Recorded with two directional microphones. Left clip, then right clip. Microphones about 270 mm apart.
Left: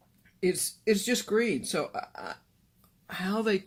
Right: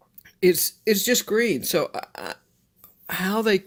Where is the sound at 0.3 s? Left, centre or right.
Right.